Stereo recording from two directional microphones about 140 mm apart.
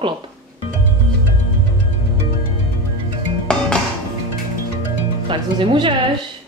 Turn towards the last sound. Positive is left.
turn(degrees=-35)  # may be behind; listen again after turning